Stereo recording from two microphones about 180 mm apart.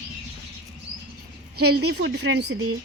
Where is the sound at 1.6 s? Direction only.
65° right (ahead or behind).